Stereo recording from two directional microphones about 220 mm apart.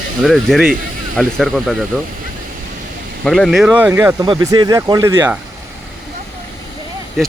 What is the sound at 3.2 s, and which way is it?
Speech, centre (ahead or behind).